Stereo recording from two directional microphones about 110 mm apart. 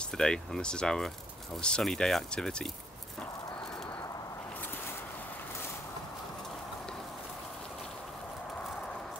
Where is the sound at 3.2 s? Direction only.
5° left (ahead or behind).